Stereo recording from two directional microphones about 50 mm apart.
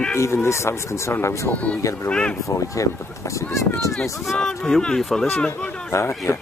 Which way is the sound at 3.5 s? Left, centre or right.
Left.